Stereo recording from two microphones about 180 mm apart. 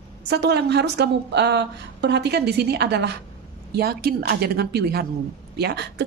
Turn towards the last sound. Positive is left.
turn(degrees=-65)  # may be behind; listen again after turning